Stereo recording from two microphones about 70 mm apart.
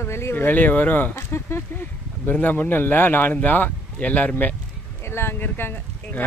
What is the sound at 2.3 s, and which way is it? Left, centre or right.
Speech, left.